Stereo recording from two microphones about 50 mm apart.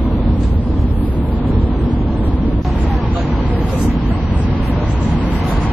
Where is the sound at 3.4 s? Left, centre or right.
Right.